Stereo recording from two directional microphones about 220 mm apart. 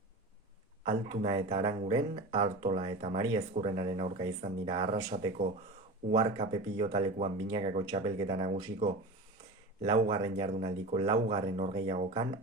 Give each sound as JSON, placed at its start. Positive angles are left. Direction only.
{"t": 0.9, "sound": "speech", "side_deg": -25}